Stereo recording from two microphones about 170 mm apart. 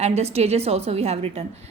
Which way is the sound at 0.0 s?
40° right (ahead or behind).